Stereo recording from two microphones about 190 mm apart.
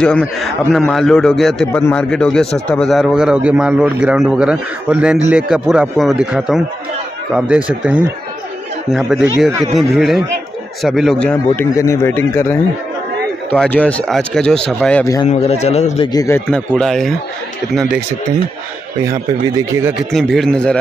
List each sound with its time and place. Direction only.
0.0 s a man's voice: 5° left (ahead or behind)
1.6 s a man's voice: 10° left (ahead or behind)
11.7 s a man's voice: 15° left (ahead or behind)
15.2 s speech: 35° left (ahead or behind)
16.1 s speech: 15° left (ahead or behind)
16.4 s a man's voice: 5° left (ahead or behind)
19.0 s speech: 15° right (ahead or behind)
20.0 s a man's voice: centre (ahead or behind)